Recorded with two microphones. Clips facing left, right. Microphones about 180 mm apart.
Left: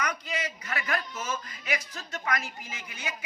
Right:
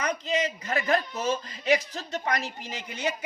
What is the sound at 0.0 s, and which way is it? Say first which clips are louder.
Speech: right 6 dB; 30° right (ahead or behind).